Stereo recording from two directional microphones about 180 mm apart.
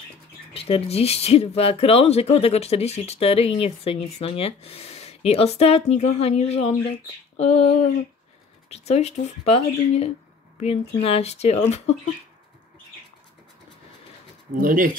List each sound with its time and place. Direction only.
0.5 s speech: 30° left (ahead or behind)
14.6 s speech: 50° right (ahead or behind)